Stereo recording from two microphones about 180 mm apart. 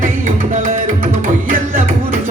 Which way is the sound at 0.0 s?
45° right (ahead or behind).